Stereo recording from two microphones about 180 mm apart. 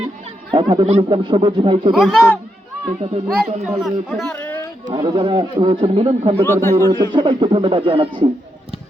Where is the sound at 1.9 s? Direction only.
Centre (ahead or behind).